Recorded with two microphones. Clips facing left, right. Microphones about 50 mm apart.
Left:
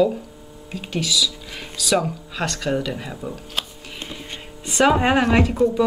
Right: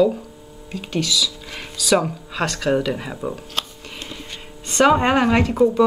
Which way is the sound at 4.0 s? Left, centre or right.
Left.